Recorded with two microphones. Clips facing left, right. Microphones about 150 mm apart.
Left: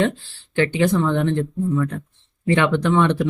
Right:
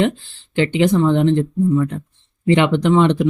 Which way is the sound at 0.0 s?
20° right (ahead or behind).